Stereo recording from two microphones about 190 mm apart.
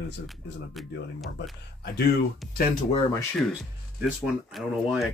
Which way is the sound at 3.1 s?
15° left (ahead or behind).